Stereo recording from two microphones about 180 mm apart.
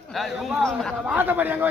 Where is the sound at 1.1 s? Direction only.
10° right (ahead or behind).